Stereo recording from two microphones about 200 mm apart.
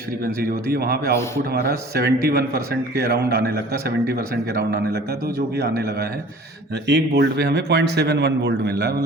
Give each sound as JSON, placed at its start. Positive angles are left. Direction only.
{"t": 0.7, "sound": "a man's voice", "side_deg": -50}